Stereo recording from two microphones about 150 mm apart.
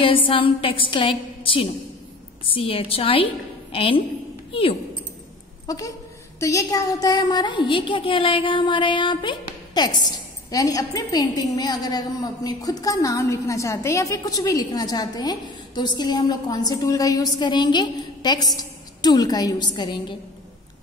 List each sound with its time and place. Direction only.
0.0 s a woman's voice: 35° left (ahead or behind)
5.7 s a woman's voice: 25° left (ahead or behind)